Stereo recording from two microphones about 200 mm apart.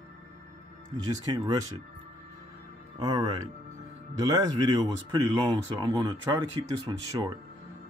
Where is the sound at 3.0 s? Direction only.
20° right (ahead or behind).